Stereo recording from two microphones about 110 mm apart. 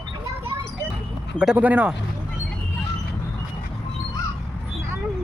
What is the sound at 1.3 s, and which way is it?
Speech, 10° right (ahead or behind).